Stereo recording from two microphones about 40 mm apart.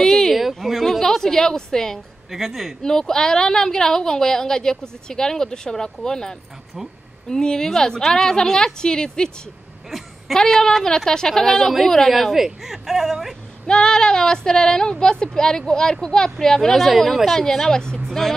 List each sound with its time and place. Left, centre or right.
0.0 s a sound: centre
0.4 s a sound: centre
2.3 s speech: centre
2.8 s a woman's voice: centre
9.8 s a sound: centre
10.3 s a woman's voice: centre
12.1 s speech: centre
13.7 s a woman's voice: centre
16.7 s speech: centre
17.4 s a woman's voice: centre